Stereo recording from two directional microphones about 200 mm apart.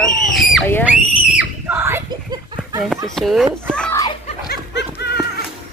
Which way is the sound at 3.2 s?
Centre (ahead or behind).